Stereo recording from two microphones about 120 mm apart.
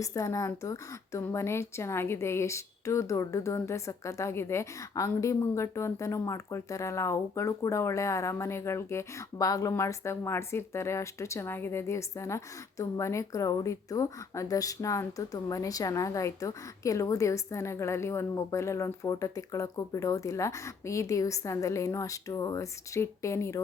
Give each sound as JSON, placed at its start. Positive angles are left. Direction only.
{"t": 0.0, "sound": "a woman's voice", "side_deg": 25}